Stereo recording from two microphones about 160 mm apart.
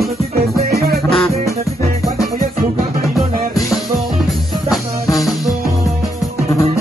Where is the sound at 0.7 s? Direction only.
75° right (ahead or behind).